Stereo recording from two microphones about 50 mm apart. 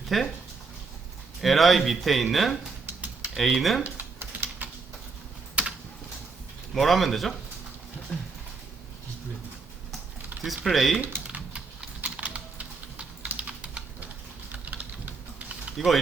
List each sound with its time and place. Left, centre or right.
0.1 s speech: centre
1.4 s speech: centre
3.8 s typing: right
5.6 s typing: right
6.7 s speech: centre
8.1 s a sound: centre
10.4 s speech: centre
11.3 s typing: centre
14.5 s typing: right
15.8 s speech: centre